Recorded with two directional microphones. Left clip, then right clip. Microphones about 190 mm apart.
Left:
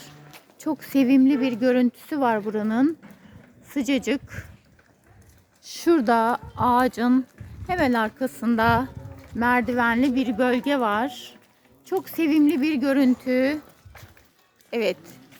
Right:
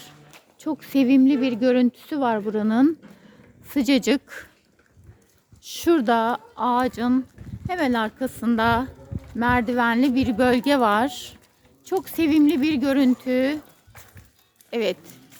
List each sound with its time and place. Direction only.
0.6 s speech: 5° right (ahead or behind); by 4.4 s 30° right (ahead or behind)
5.6 s speech: 10° right (ahead or behind); by 11.3 s 30° right (ahead or behind)
11.9 s speech: 20° right (ahead or behind)
14.7 s speech: 10° right (ahead or behind)